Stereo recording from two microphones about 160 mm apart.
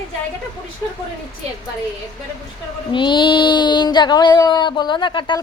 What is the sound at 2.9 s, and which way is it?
Child singing, 30° left (ahead or behind).